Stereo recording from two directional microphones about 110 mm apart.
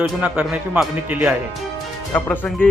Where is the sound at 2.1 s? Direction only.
10° left (ahead or behind).